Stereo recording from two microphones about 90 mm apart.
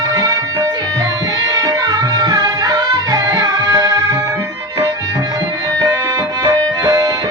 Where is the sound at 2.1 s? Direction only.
45° right (ahead or behind).